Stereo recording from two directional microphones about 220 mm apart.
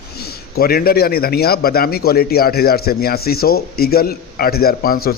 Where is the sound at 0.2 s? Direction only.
45° left (ahead or behind).